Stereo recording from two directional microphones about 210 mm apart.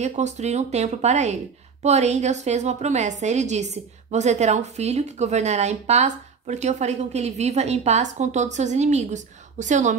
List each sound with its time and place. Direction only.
0.0 s a woman's voice: 35° right (ahead or behind)